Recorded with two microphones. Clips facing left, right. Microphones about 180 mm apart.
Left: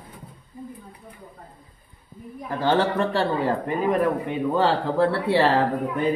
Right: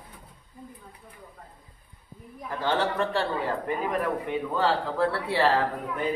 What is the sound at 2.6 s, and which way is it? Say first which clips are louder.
Speech: left 5 dB; 30° left (ahead or behind).